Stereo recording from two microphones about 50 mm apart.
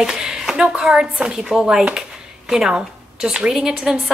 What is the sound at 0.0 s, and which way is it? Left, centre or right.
Speech, centre.